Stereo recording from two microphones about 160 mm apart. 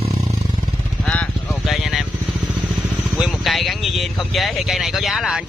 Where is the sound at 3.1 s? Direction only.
Centre (ahead or behind).